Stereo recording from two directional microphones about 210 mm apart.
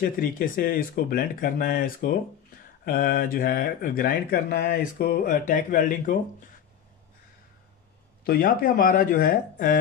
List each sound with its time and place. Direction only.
0.0 s speech: 40° left (ahead or behind)
8.2 s speech: 45° left (ahead or behind)